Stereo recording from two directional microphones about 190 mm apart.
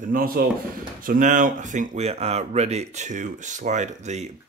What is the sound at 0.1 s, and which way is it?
Speech, 50° right (ahead or behind).